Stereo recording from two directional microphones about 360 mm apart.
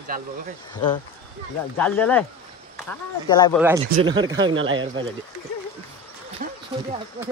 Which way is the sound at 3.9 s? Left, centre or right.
Centre.